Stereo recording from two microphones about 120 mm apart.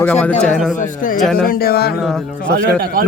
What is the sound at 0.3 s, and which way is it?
Speech, 75° left (ahead or behind).